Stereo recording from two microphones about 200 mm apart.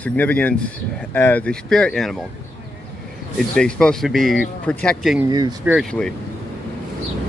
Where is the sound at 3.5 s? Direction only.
5° left (ahead or behind).